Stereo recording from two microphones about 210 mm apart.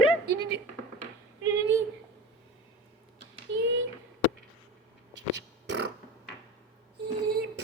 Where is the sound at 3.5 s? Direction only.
60° right (ahead or behind).